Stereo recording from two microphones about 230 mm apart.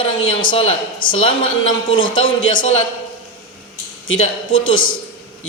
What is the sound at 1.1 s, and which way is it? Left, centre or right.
Speech, left.